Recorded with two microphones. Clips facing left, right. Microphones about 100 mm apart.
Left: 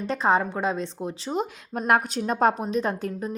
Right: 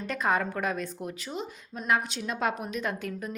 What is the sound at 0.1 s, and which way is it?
A woman's voice, 30° left (ahead or behind).